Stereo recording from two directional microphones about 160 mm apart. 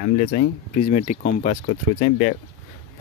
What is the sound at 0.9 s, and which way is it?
Speech, 50° left (ahead or behind).